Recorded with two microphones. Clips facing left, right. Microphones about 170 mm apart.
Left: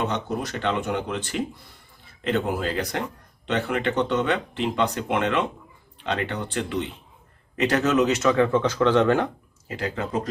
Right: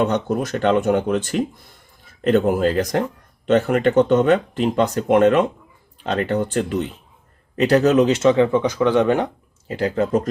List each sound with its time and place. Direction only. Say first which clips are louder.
0.0 s speech: right 7 dB; 50° right (ahead or behind); by 9.3 s 15° right (ahead or behind)
9.6 s speech: right 8 dB; 35° right (ahead or behind)